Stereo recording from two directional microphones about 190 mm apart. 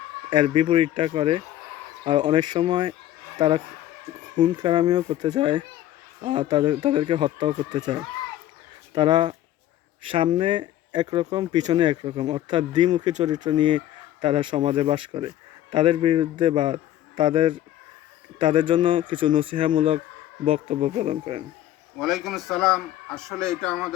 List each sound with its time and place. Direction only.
0.3 s a woman's voice: 25° right (ahead or behind)
9.0 s speech: 25° right (ahead or behind)
21.9 s speech: centre (ahead or behind)